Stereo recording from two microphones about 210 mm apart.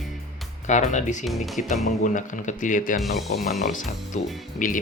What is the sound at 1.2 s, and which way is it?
Speech, centre (ahead or behind).